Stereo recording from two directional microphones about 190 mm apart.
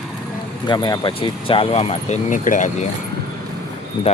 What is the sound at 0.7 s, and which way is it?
Speech, 20° left (ahead or behind).